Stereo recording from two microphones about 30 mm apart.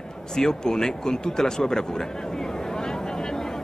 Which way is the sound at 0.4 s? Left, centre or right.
Left.